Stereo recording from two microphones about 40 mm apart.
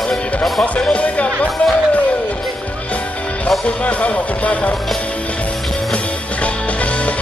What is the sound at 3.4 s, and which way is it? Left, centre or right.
Music, left.